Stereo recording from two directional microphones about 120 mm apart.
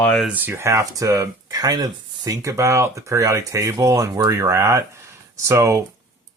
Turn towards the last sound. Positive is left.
turn(degrees=-25)  # may be behind; listen again after turning